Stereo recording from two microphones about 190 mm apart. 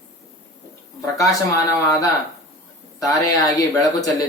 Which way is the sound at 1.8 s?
15° left (ahead or behind).